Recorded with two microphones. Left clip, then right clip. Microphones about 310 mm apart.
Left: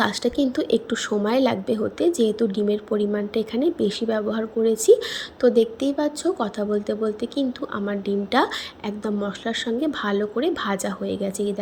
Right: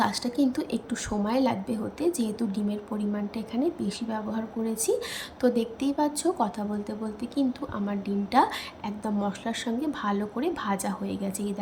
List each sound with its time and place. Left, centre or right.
0.0 s a woman's voice: centre